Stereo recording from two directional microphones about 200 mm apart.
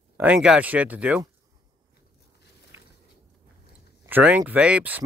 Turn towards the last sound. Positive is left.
turn(degrees=-10)  # may be behind; listen again after turning